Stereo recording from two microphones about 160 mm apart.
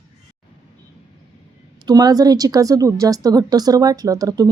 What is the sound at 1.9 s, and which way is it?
A woman's voice, 25° right (ahead or behind).